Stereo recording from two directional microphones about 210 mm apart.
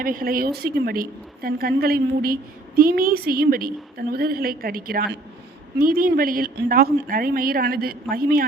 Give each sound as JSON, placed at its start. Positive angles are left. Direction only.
{"t": 0.0, "sound": "a woman's voice", "side_deg": -40}